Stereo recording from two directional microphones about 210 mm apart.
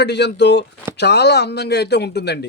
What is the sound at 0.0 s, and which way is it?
Speech, 55° left (ahead or behind).